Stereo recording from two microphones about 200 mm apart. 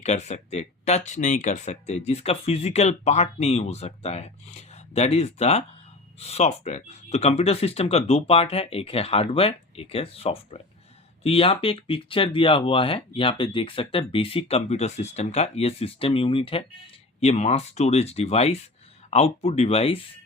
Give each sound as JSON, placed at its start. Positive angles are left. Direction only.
{"t": 0.0, "sound": "speech", "side_deg": 35}